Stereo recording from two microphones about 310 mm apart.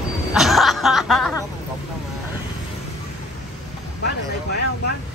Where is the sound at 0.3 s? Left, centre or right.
Centre.